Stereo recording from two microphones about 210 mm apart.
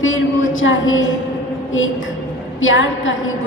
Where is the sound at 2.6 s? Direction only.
65° left (ahead or behind).